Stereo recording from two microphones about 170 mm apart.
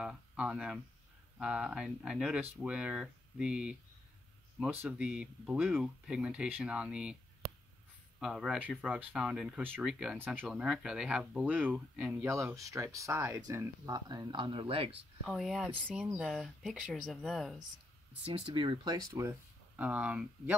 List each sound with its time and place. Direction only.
0.0 s speech: 5° right (ahead or behind)
8.2 s speech: 5° right (ahead or behind); by 15.0 s 35° right (ahead or behind)
15.2 s speech: centre (ahead or behind)
18.2 s speech: 35° right (ahead or behind)
19.8 s speech: 10° right (ahead or behind)